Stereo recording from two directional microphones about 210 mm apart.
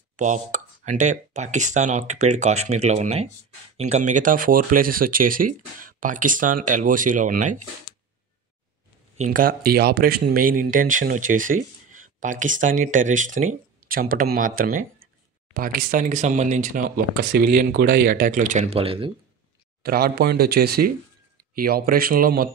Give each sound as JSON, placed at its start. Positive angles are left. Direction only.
{"t": 0.2, "sound": "speech", "side_deg": -35}
{"t": 9.2, "sound": "speech", "side_deg": -40}
{"t": 19.8, "sound": "speech", "side_deg": -45}